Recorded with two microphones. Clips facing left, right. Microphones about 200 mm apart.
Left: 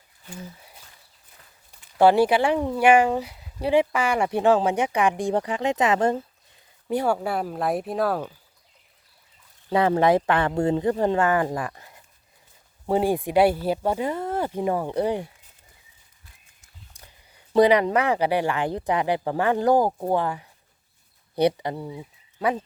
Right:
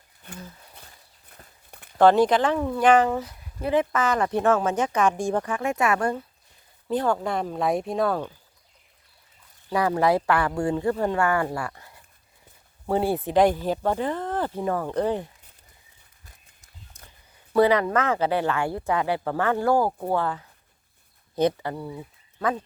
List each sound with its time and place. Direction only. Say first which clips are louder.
2.0 s speech: even; 10° left (ahead or behind)
6.9 s speech: left 1 dB; 10° left (ahead or behind)
9.7 s speech: left 3 dB; 25° left (ahead or behind)
17.5 s speech: left 2 dB; 15° left (ahead or behind)